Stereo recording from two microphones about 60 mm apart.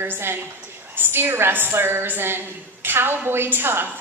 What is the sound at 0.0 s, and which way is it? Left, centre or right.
A woman's voice, right.